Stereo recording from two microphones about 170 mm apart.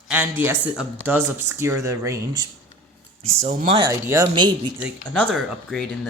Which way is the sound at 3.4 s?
45° right (ahead or behind).